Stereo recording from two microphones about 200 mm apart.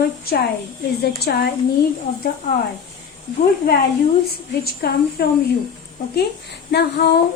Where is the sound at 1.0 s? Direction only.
50° left (ahead or behind).